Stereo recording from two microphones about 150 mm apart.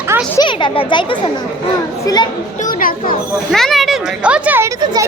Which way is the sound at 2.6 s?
65° left (ahead or behind).